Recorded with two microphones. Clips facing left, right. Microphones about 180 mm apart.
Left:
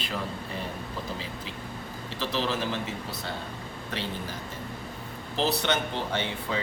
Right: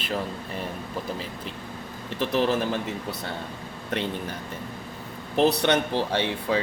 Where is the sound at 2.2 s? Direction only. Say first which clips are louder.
Right 6 dB; 55° right (ahead or behind).